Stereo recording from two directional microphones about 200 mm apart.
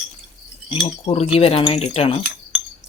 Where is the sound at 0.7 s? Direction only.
30° left (ahead or behind).